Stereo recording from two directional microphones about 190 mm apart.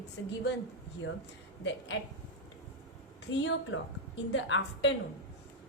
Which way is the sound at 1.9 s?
75° left (ahead or behind).